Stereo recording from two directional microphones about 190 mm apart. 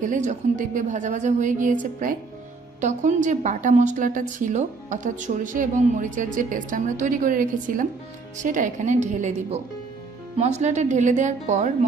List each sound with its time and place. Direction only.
0.0 s a woman's voice: 40° right (ahead or behind)